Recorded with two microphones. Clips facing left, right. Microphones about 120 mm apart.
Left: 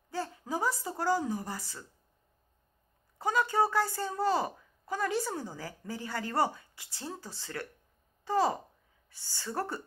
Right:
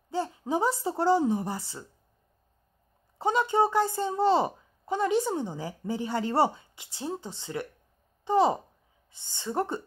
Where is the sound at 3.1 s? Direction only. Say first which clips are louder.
Right 4 dB; 25° right (ahead or behind).